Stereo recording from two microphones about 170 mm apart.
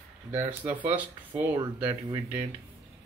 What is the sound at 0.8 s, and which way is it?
Speech, 10° right (ahead or behind).